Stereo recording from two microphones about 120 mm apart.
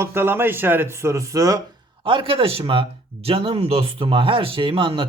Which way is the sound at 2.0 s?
45° right (ahead or behind).